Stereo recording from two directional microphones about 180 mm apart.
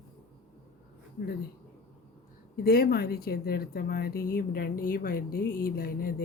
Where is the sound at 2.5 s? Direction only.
60° left (ahead or behind).